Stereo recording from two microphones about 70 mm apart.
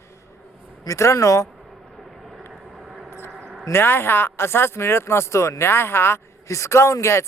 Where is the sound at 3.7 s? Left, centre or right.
Left.